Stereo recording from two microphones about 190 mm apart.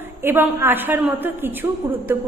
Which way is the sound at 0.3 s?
10° right (ahead or behind).